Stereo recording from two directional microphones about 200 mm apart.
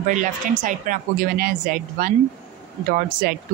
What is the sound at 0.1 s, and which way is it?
A woman's voice, 40° right (ahead or behind).